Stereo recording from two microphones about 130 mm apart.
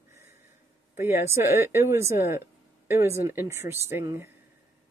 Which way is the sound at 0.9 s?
20° right (ahead or behind).